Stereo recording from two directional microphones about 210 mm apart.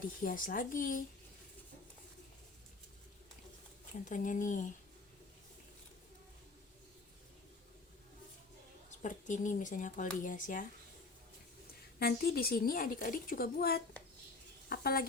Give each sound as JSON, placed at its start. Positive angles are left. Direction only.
{"t": 0.2, "sound": "speech", "side_deg": 40}
{"t": 4.1, "sound": "speech", "side_deg": 40}
{"t": 8.9, "sound": "speech", "side_deg": 35}
{"t": 11.9, "sound": "a woman's voice", "side_deg": 50}